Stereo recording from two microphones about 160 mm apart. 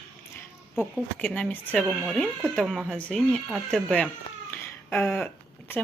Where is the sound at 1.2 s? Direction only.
5° left (ahead or behind).